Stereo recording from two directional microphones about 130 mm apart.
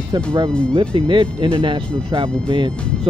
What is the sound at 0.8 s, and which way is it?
Speech, 40° right (ahead or behind).